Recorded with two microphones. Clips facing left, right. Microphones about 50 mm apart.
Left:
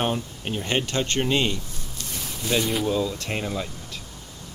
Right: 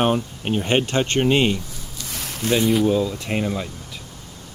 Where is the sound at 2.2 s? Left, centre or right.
Right.